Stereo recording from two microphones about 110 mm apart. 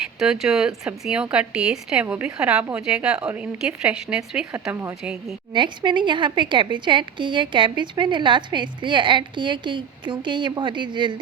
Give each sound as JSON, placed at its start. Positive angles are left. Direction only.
{"t": 0.2, "sound": "a woman's voice", "side_deg": -5}
{"t": 4.7, "sound": "a woman's voice", "side_deg": -25}
{"t": 5.0, "sound": "a woman's voice", "side_deg": -5}
{"t": 5.5, "sound": "a woman's voice", "side_deg": -45}